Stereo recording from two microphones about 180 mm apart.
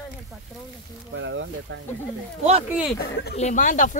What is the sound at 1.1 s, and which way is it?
Speech, 90° right.